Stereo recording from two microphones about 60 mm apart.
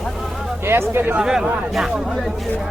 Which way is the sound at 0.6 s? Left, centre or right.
Right.